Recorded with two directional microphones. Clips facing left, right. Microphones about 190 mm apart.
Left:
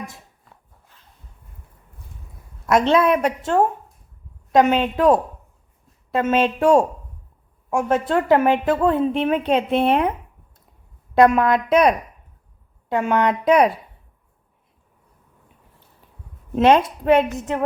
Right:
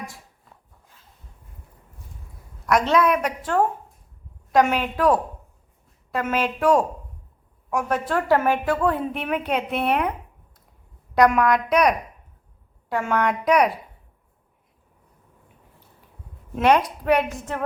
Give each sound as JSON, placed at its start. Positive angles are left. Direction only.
{"t": 2.6, "sound": "a woman's voice", "side_deg": 25}
{"t": 11.1, "sound": "a woman's voice", "side_deg": 25}
{"t": 16.6, "sound": "a woman's voice", "side_deg": 25}